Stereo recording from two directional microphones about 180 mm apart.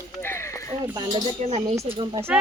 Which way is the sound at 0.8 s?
20° right (ahead or behind).